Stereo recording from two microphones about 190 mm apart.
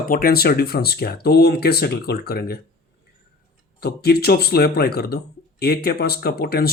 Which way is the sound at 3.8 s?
55° left (ahead or behind).